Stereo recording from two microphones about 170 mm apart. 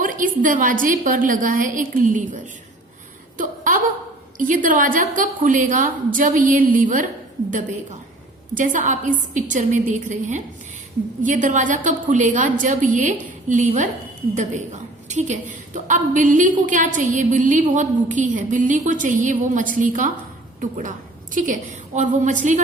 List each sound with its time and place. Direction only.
0.0 s a woman's voice: 50° right (ahead or behind)
3.3 s a sound: 50° right (ahead or behind)
4.4 s a woman's voice: 50° right (ahead or behind)